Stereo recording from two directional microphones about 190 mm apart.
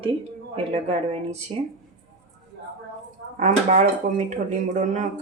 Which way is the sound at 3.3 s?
40° right (ahead or behind).